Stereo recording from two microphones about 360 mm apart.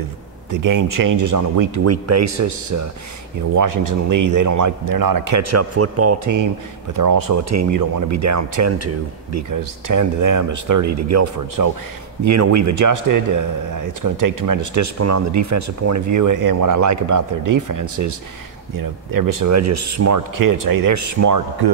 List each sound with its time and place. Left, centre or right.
0.5 s a man's voice: right
6.9 s speech: right
7.4 s a man's voice: right
9.5 s a man's voice: right